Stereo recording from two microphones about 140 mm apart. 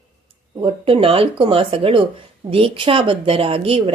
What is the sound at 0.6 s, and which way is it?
Speech, 40° right (ahead or behind).